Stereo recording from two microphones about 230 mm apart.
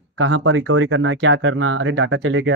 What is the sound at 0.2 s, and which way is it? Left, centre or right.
Speech, right.